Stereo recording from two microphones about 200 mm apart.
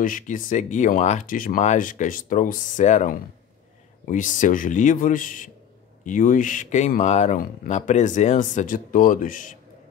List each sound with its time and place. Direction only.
0.0 s speech: 40° left (ahead or behind)